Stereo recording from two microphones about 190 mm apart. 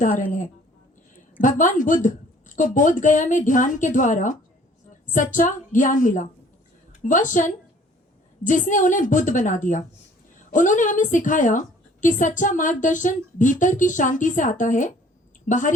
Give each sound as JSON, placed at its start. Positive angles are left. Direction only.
{"t": 1.4, "sound": "a woman's voice", "side_deg": 45}